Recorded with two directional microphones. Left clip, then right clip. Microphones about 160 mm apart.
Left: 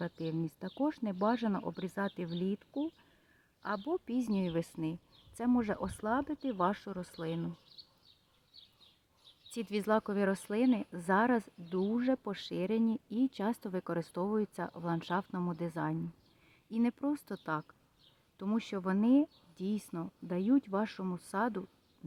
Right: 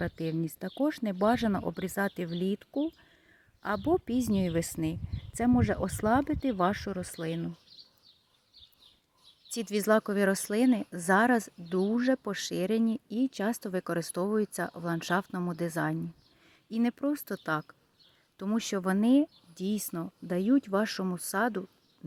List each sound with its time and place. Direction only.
0.0 s speech: 25° right (ahead or behind)
9.5 s speech: 20° right (ahead or behind)